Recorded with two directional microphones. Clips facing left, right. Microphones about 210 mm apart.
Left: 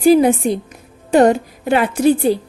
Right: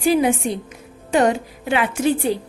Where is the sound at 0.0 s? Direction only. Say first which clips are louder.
Left 6 dB; 40° left (ahead or behind).